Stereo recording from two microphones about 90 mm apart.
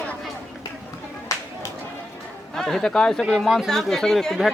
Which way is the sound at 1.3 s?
35° left (ahead or behind).